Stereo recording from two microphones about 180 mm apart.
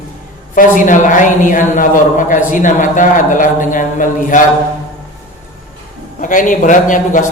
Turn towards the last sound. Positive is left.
turn(degrees=45)  # may be behind; listen again after turning